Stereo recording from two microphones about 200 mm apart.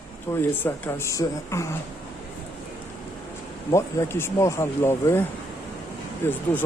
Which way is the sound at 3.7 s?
15° left (ahead or behind).